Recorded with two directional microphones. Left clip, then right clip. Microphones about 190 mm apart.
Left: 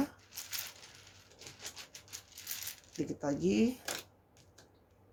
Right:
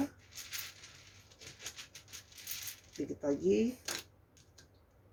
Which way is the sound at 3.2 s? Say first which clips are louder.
Right 3 dB; 40° left (ahead or behind).